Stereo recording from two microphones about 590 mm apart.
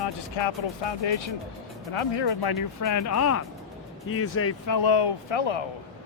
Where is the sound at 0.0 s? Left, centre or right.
Left.